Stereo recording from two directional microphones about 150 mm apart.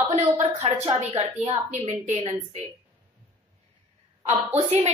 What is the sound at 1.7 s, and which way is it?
Speech, 50° right (ahead or behind).